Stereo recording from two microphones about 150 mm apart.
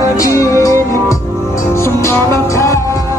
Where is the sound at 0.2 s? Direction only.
20° left (ahead or behind).